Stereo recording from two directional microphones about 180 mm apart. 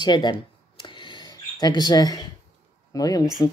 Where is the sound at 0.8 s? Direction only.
25° left (ahead or behind).